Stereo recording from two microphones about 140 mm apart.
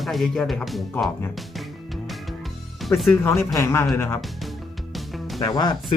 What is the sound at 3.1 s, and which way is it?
Speech, 20° left (ahead or behind).